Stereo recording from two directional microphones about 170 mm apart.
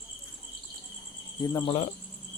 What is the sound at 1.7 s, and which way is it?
Speech, 40° left (ahead or behind).